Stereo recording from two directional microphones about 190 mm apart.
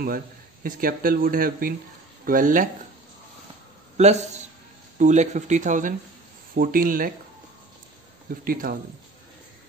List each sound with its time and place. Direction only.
0.7 s speech: 50° right (ahead or behind)
3.9 s a man's voice: 35° right (ahead or behind)
8.3 s speech: 50° right (ahead or behind)